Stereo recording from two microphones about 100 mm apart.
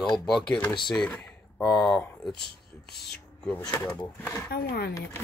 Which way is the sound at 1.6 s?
Centre (ahead or behind).